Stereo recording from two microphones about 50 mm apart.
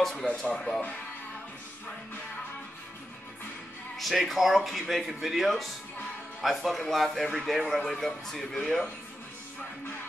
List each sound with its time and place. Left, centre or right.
0.0 s speech: centre
0.5 s speech: centre
4.0 s speech: centre